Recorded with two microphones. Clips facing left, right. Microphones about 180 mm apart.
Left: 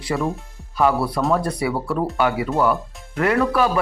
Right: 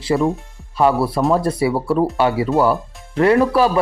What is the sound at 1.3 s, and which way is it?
Speech, 25° right (ahead or behind).